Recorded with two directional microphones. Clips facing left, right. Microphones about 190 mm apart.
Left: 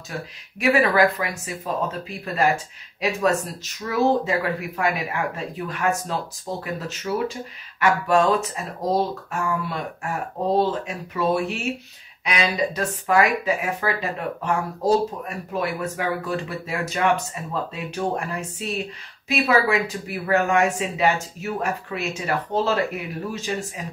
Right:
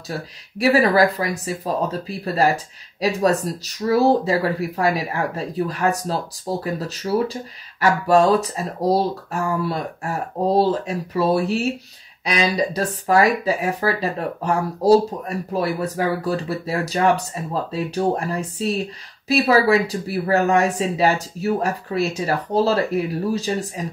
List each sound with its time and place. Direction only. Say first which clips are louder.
0.1 s speech: right 4 dB; 35° right (ahead or behind)